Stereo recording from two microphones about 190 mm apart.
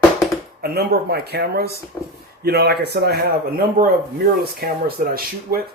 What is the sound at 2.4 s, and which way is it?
A man's voice, 55° right (ahead or behind).